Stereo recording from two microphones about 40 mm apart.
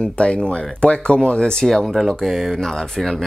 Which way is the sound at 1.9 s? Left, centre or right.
Centre.